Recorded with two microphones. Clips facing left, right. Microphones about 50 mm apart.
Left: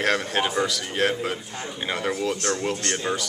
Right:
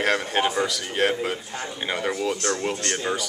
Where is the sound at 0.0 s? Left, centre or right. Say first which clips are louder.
Right 1 dB; centre.